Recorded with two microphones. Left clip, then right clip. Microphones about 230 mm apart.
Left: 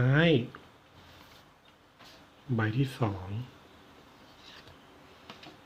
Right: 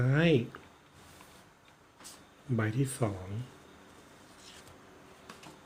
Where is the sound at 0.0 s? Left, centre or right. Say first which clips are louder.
Left 2 dB; centre.